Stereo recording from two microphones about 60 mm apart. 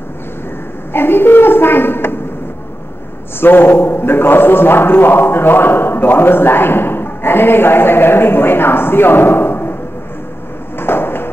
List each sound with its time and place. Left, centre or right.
0.9 s a woman's voice: left
3.3 s a man's voice: left
10.8 s a sound: left